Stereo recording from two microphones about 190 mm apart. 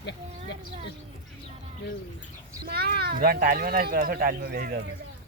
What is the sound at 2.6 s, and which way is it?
Speech, 55° right (ahead or behind).